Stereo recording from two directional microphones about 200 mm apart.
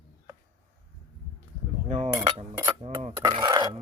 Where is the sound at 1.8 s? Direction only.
35° right (ahead or behind).